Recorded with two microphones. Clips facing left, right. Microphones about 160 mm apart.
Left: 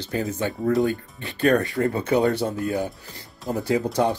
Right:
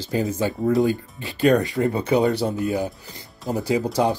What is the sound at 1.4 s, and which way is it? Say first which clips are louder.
Speech: right 2 dB; 20° right (ahead or behind).